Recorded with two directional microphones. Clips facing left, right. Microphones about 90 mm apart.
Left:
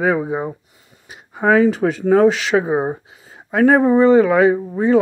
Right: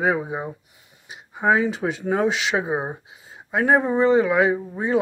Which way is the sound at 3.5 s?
50° left (ahead or behind).